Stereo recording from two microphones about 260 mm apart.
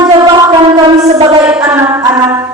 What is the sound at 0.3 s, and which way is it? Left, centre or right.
Civil defense siren, centre.